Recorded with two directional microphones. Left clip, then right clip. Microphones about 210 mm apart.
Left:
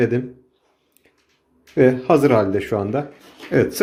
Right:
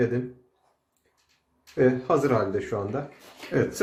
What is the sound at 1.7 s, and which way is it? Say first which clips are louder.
Speech: left 7 dB; 35° left (ahead or behind).